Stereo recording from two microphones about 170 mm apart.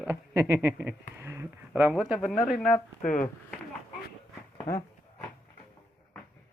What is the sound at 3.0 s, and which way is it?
Speech, 50° left (ahead or behind).